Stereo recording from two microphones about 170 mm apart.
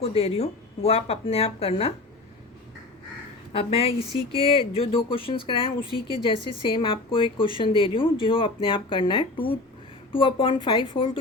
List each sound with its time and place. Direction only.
0.0 s speech: 35° left (ahead or behind)
3.5 s a woman's voice: 35° left (ahead or behind)